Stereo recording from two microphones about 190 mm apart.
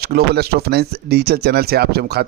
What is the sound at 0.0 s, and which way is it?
Speech, 55° right (ahead or behind).